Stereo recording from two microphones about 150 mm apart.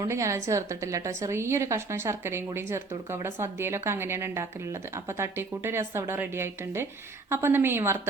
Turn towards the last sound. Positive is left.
turn(degrees=-15)  # may be behind; listen again after turning